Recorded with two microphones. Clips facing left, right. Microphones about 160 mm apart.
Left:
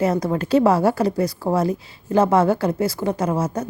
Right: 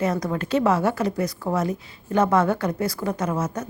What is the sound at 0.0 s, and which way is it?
A woman's voice, 30° left (ahead or behind).